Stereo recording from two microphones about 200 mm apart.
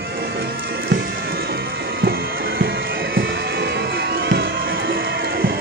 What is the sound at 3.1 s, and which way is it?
Music, 55° right (ahead or behind).